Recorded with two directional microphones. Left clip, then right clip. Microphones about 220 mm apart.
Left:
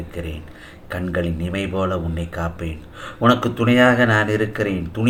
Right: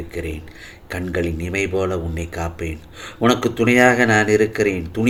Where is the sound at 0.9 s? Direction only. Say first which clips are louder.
Right 1 dB; 35° right (ahead or behind).